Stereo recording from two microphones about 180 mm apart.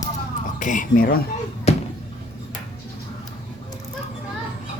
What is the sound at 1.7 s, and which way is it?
Bouncing, 35° left (ahead or behind).